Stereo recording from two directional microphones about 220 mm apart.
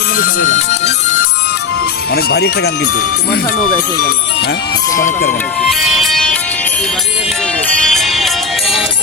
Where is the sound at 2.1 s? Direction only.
45° left (ahead or behind).